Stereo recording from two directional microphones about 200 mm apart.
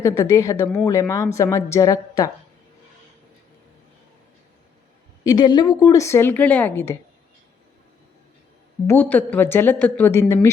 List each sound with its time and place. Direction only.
0.0 s a woman's voice: 15° left (ahead or behind)
5.2 s a woman's voice: 20° left (ahead or behind)
8.9 s a woman's voice: 10° left (ahead or behind)